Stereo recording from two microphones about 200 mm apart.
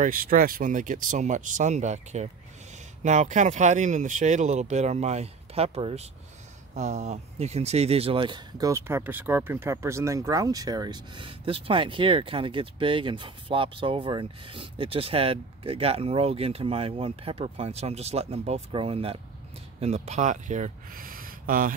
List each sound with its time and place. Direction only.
0.0 s speech: 45° right (ahead or behind)